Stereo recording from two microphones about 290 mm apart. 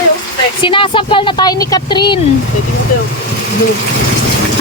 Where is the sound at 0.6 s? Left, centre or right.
Centre.